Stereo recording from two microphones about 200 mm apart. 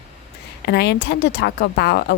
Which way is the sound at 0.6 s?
55° left (ahead or behind).